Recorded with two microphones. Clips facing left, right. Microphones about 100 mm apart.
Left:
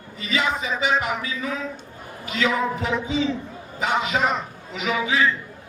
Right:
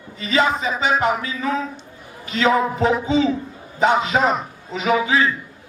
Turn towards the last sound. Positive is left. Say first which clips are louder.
# right 4 dB
turn(degrees=-35)  # may be behind; listen again after turning